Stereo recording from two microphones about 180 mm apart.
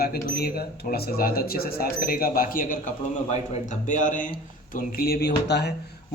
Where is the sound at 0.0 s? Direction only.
55° left (ahead or behind).